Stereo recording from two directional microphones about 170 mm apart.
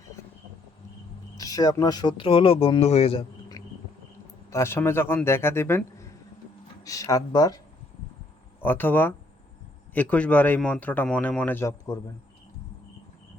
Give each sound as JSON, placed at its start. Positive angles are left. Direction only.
{"t": 1.4, "sound": "speech", "side_deg": 20}
{"t": 4.5, "sound": "a man's voice", "side_deg": 15}
{"t": 8.6, "sound": "a man's voice", "side_deg": 10}